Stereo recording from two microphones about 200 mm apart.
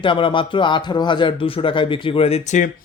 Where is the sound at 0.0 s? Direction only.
25° left (ahead or behind).